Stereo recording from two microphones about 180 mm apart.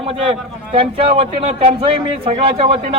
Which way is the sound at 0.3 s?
30° right (ahead or behind).